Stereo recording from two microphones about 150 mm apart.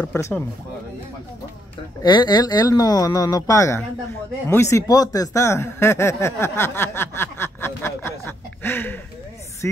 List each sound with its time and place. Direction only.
0.0 s speech: 15° left (ahead or behind)
2.0 s speech: 30° left (ahead or behind)